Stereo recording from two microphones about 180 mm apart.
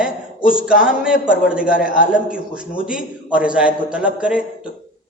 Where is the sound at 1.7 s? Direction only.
50° left (ahead or behind).